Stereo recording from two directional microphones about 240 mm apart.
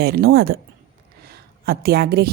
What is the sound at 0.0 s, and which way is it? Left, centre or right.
A woman's voice, right.